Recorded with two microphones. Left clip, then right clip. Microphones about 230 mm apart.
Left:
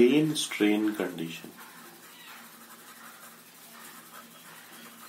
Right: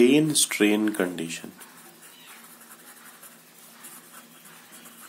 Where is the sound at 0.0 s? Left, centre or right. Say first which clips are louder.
Right 3 dB; right.